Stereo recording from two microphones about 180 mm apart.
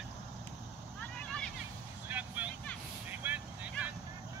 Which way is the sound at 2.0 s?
10° right (ahead or behind).